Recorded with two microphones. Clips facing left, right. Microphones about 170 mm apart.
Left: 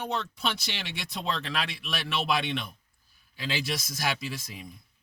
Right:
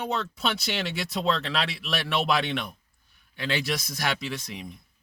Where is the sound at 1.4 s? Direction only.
75° right (ahead or behind).